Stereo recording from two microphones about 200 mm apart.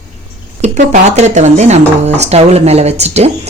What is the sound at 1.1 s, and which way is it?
Speech, 35° right (ahead or behind).